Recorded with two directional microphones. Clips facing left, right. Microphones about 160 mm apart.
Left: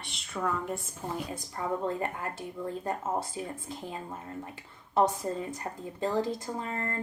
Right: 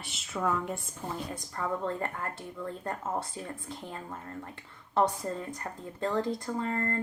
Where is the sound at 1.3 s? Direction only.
15° left (ahead or behind).